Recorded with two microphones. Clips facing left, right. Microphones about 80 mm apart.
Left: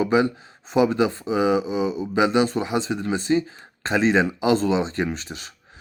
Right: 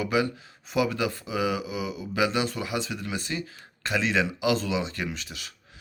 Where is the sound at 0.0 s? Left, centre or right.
Left.